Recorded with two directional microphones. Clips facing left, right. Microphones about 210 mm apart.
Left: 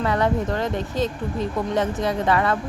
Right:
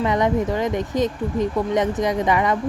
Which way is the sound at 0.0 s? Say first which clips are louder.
Right 2 dB; 15° right (ahead or behind).